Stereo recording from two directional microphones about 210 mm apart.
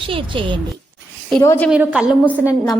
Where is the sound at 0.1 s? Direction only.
25° right (ahead or behind).